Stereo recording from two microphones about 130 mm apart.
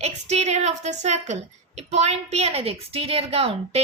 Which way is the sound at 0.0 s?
55° right (ahead or behind).